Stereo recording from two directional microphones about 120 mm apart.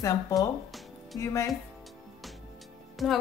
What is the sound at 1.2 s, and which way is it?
Speech, 25° left (ahead or behind).